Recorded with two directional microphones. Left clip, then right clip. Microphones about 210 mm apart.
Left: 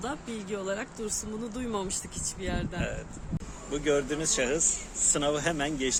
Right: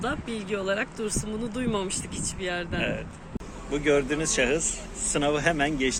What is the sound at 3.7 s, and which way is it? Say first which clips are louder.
A man's voice: right 4 dB; 5° left (ahead or behind).